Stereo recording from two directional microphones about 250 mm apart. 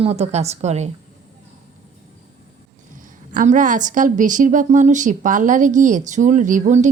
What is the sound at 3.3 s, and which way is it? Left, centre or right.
A woman's voice, right.